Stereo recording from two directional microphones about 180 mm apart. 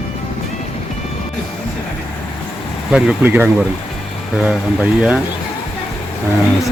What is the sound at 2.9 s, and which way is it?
Speech, 5° right (ahead or behind).